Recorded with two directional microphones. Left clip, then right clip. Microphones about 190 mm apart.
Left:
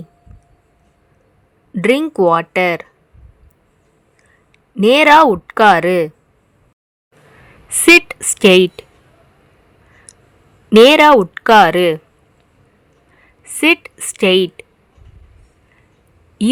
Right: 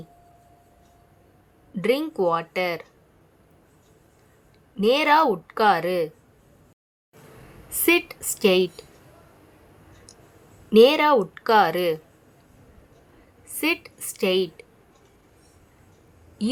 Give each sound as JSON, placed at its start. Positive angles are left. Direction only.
{"t": 1.7, "sound": "a woman's voice", "side_deg": 40}
{"t": 4.8, "sound": "a woman's voice", "side_deg": 45}
{"t": 7.7, "sound": "speech", "side_deg": 35}
{"t": 10.7, "sound": "speech", "side_deg": 40}
{"t": 13.4, "sound": "a woman's voice", "side_deg": 40}